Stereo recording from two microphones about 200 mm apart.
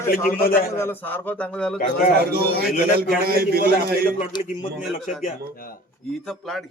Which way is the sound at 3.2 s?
50° right (ahead or behind).